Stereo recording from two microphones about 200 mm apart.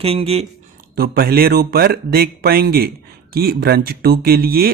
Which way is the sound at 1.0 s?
50° right (ahead or behind).